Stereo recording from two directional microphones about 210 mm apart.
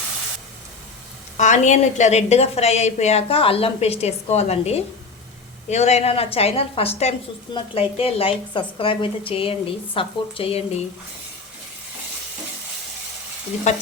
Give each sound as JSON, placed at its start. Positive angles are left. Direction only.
{"t": 1.4, "sound": "a woman's voice", "side_deg": 35}